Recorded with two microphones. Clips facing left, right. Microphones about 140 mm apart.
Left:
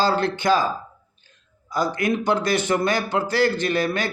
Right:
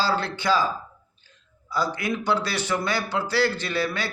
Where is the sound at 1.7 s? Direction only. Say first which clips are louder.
Left 4 dB; 50° left (ahead or behind).